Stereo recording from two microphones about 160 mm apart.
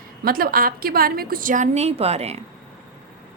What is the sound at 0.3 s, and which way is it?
A woman's voice, 65° right (ahead or behind).